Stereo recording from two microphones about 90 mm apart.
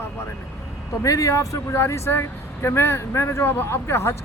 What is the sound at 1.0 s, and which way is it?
Speech, 40° left (ahead or behind).